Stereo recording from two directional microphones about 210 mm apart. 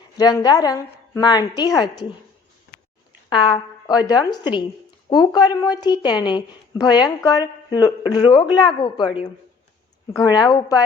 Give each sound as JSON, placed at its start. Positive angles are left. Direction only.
{"t": 0.2, "sound": "speech", "side_deg": 20}
{"t": 3.2, "sound": "speech", "side_deg": 20}
{"t": 10.1, "sound": "a woman's voice", "side_deg": 20}